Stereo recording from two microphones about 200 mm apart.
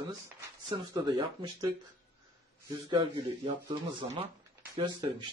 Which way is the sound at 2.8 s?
20° right (ahead or behind).